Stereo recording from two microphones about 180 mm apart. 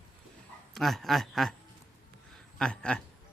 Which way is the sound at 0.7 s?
Centre (ahead or behind).